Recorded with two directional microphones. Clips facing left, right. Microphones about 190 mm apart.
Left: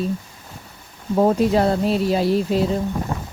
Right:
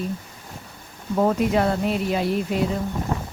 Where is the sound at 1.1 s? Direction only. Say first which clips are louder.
Left 3 dB; 30° left (ahead or behind).